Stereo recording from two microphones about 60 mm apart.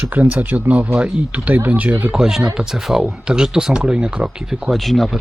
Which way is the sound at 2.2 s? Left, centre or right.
Centre.